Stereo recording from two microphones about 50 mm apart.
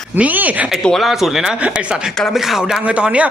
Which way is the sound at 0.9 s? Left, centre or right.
Centre.